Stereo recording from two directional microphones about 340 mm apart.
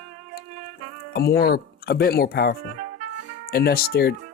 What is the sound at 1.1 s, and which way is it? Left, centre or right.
Speech, left.